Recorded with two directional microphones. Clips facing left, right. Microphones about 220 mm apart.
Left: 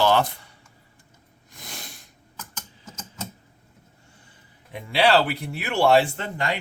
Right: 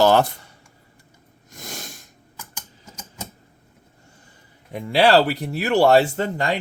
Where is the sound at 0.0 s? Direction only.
45° right (ahead or behind).